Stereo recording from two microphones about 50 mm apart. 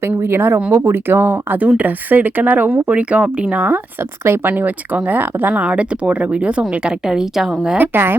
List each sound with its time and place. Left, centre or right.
0.2 s speech: right
5.6 s speech: right
7.8 s speech: right